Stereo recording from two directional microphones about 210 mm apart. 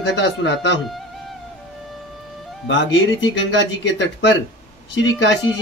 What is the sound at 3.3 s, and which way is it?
A man's voice, 60° left (ahead or behind).